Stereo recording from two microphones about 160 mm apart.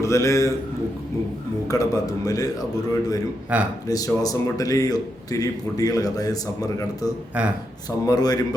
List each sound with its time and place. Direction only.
0.0 s a man's voice: 20° left (ahead or behind)
1.6 s a man's voice: 20° left (ahead or behind)
3.5 s speech: 10° right (ahead or behind)
3.8 s a man's voice: 20° left (ahead or behind)
7.4 s speech: 10° right (ahead or behind)
7.9 s a man's voice: 25° left (ahead or behind)